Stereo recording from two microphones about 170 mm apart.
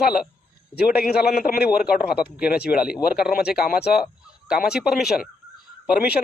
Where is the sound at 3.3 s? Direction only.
65° left (ahead or behind).